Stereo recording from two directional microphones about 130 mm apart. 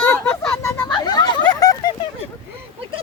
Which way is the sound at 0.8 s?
35° left (ahead or behind).